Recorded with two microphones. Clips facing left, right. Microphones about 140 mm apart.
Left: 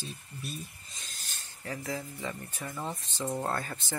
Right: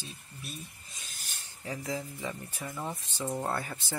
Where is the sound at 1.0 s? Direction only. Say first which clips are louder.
Left 1 dB; 15° right (ahead or behind).